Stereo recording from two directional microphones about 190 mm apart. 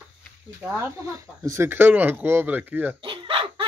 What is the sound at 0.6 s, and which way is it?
Speech, 5° right (ahead or behind).